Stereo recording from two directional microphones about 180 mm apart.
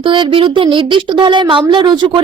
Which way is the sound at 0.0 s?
30° right (ahead or behind).